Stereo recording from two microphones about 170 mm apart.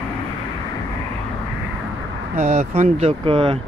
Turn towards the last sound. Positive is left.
turn(degrees=-30)  # may be behind; listen again after turning